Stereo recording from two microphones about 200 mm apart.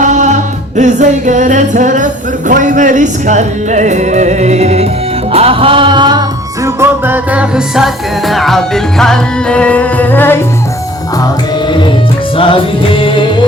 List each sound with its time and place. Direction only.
0.0 s music: 35° right (ahead or behind); by 10.4 s 10° left (ahead or behind)
12.4 s music: 25° left (ahead or behind)